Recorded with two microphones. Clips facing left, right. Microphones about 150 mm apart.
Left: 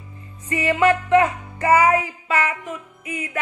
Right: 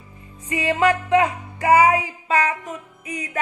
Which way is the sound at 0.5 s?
15° right (ahead or behind).